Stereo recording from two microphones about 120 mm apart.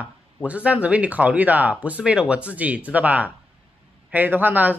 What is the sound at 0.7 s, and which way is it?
Speech, 10° right (ahead or behind).